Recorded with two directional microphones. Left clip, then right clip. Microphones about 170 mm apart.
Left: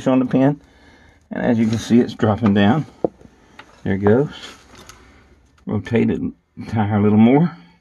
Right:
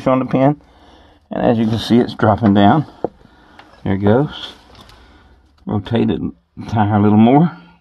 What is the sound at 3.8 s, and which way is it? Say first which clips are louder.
Speech: right 1 dB; 25° right (ahead or behind).